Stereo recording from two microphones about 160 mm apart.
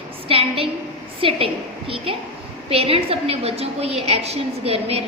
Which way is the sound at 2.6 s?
35° right (ahead or behind).